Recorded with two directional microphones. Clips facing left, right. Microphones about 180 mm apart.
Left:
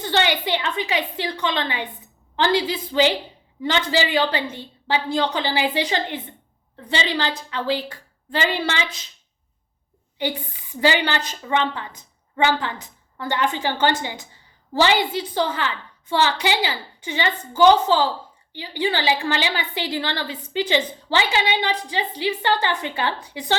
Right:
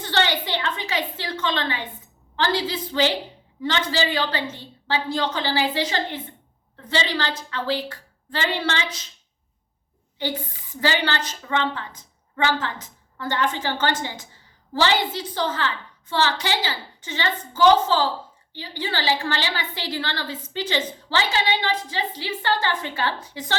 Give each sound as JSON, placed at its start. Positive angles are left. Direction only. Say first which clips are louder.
{"t": 0.1, "sound": "a woman's voice", "louder": "left 2 dB", "side_deg": 15}
{"t": 10.2, "sound": "a woman's voice", "louder": "left 2 dB", "side_deg": 15}